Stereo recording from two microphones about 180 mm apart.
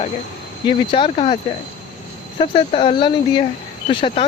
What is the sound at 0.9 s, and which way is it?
Speech, 30° left (ahead or behind).